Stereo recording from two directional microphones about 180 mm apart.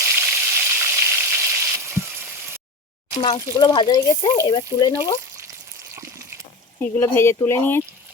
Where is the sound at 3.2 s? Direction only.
30° left (ahead or behind).